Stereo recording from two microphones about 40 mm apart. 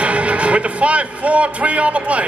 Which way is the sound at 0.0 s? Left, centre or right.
Right.